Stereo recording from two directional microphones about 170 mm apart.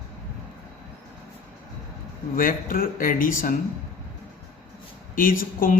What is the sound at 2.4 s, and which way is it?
Speech, 55° left (ahead or behind).